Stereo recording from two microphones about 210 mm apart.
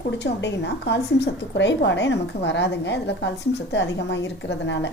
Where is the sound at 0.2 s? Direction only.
55° left (ahead or behind).